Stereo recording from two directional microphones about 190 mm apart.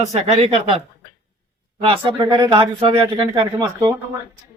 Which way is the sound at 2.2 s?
20° right (ahead or behind).